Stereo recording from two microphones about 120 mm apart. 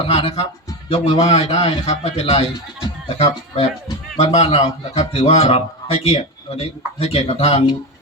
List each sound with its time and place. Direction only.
0.0 s a man's voice: 55° left (ahead or behind)
1.2 s a man's voice: 70° left (ahead or behind)